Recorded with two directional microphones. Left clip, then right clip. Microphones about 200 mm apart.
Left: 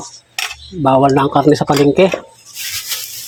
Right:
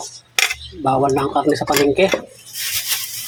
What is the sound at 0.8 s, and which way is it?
Speech, 30° left (ahead or behind).